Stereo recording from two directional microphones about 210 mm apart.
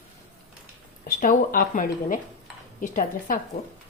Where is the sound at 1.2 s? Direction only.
40° left (ahead or behind).